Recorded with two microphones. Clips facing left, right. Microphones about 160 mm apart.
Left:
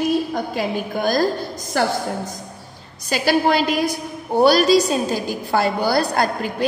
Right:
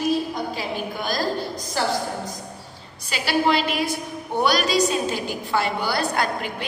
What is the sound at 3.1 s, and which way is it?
A woman's voice, 45° left (ahead or behind).